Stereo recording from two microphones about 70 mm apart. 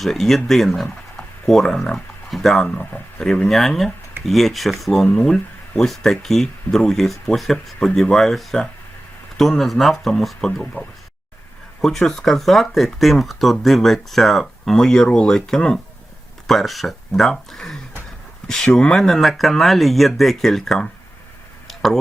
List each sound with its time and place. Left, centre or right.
0.0 s speech: centre
2.6 s speech: left
3.2 s speech: centre
10.8 s speech: left
11.8 s speech: centre
21.7 s a sound: centre